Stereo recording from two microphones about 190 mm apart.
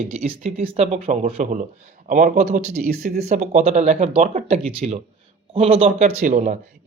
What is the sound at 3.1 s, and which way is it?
Speech, 35° right (ahead or behind).